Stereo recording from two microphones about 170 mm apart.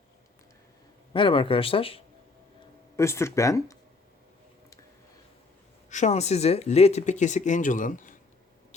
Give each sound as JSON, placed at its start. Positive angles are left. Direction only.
{"t": 1.1, "sound": "speech", "side_deg": 30}
{"t": 2.9, "sound": "speech", "side_deg": 15}
{"t": 5.9, "sound": "speech", "side_deg": 45}